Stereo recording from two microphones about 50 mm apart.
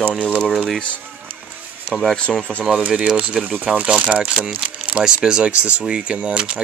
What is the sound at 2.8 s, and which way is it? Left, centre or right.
Speech, right.